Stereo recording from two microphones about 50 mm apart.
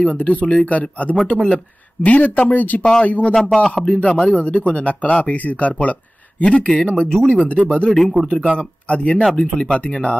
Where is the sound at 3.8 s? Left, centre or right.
Left.